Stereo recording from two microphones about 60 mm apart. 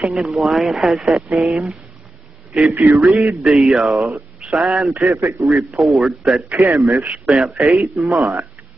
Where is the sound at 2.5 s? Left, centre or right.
Centre.